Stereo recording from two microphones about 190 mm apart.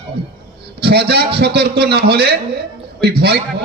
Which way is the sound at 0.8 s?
55° right (ahead or behind).